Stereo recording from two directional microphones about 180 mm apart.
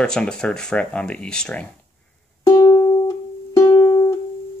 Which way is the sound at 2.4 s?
20° left (ahead or behind).